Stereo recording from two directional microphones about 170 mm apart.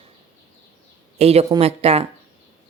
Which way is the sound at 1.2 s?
35° right (ahead or behind).